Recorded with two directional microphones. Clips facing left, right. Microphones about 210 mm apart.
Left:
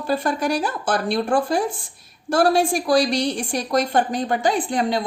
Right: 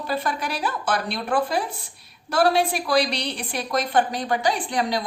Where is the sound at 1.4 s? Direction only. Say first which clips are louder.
Left 4 dB; 50° left (ahead or behind).